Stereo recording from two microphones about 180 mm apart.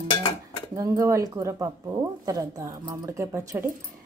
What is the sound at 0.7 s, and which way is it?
Speech, 20° right (ahead or behind).